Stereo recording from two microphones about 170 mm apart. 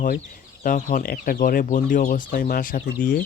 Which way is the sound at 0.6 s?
55° left (ahead or behind).